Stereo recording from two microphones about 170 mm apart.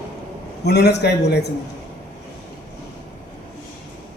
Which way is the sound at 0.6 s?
80° left.